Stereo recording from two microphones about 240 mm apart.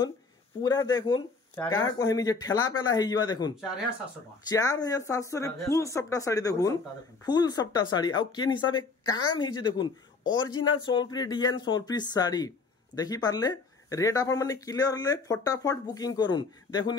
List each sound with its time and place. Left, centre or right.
0.6 s a woman's voice: centre